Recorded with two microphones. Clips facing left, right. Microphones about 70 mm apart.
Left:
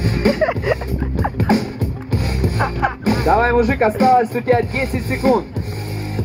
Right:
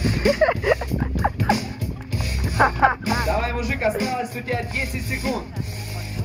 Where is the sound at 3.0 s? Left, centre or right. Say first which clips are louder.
Left 8 dB; left.